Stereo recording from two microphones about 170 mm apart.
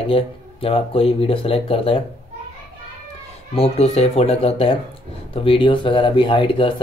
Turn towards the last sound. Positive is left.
turn(degrees=30)  # may be behind; listen again after turning